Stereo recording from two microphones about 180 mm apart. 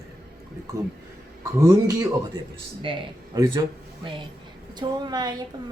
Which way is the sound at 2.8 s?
25° right (ahead or behind).